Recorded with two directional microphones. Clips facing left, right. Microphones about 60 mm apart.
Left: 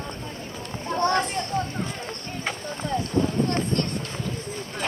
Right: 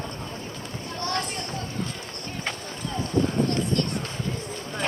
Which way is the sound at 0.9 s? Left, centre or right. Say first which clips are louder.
Left 7 dB; left.